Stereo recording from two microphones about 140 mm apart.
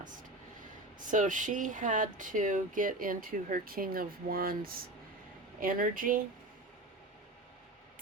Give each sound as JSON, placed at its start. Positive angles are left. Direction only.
{"t": 0.0, "sound": "speech", "side_deg": -70}